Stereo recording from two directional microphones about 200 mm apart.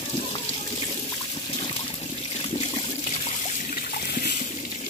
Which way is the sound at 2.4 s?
30° left (ahead or behind).